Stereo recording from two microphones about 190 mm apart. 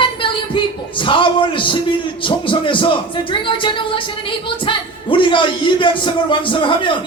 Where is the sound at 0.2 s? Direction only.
25° left (ahead or behind).